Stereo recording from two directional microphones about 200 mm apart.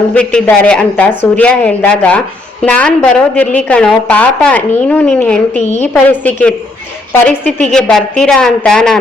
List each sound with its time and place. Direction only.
0.1 s a woman's voice: 5° left (ahead or behind)
5.5 s a woman's voice: 35° left (ahead or behind)
5.8 s a woman's voice: 10° left (ahead or behind)